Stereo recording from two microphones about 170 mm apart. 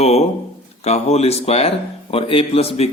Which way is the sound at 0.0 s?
40° left (ahead or behind).